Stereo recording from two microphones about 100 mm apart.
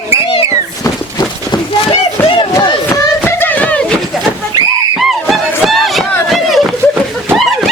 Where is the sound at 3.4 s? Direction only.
15° left (ahead or behind).